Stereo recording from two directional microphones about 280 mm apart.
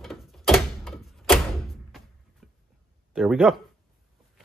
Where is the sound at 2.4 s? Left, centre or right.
Centre.